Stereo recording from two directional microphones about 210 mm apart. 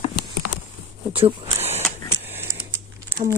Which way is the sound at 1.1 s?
25° right (ahead or behind).